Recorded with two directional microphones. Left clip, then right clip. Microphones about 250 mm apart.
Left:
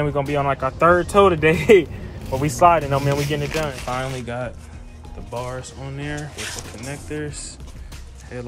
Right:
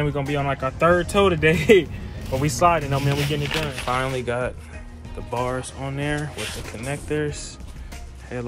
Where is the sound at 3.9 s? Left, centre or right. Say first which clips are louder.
Right 3 dB; centre.